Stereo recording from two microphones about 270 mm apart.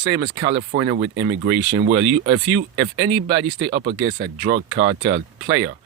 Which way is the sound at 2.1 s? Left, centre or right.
Right.